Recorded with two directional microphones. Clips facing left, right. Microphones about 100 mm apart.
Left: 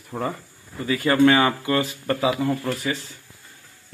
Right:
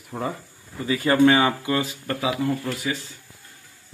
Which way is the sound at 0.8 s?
25° right (ahead or behind).